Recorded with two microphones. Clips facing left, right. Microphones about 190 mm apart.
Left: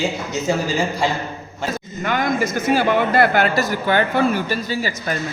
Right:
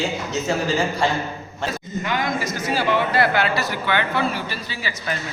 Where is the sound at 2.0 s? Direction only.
50° left (ahead or behind).